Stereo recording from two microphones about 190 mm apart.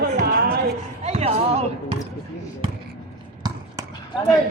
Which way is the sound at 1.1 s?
35° right (ahead or behind).